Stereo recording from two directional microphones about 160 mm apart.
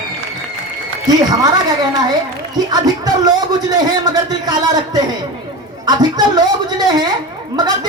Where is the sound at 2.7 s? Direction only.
25° right (ahead or behind).